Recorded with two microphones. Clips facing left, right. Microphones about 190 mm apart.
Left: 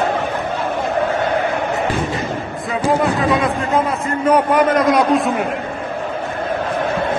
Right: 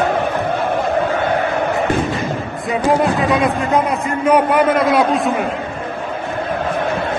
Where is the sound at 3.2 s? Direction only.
Centre (ahead or behind).